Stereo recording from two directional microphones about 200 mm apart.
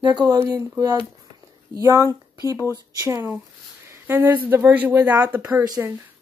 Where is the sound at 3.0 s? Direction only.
15° right (ahead or behind).